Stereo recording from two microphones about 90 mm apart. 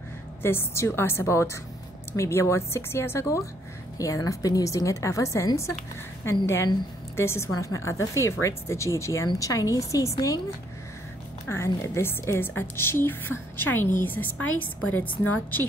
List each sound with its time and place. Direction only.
0.4 s a woman's voice: 25° left (ahead or behind)
11.4 s a woman's voice: 30° left (ahead or behind)